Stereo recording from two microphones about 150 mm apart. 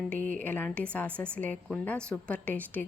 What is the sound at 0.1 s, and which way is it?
A woman's voice, 10° left (ahead or behind).